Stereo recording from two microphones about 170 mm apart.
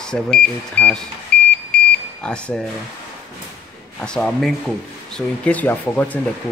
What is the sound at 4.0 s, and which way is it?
Speech, 5° left (ahead or behind).